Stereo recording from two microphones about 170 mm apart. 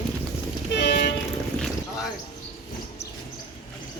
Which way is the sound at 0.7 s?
90° left.